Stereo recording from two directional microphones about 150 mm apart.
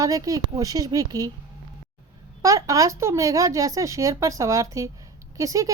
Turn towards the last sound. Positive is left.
turn(degrees=-20)  # may be behind; listen again after turning